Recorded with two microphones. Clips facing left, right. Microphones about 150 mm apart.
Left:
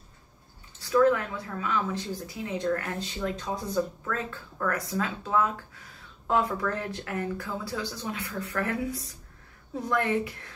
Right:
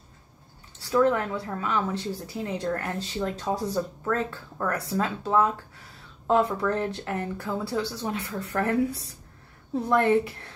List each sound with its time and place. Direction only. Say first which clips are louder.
0.7 s a woman's voice: even; 30° right (ahead or behind)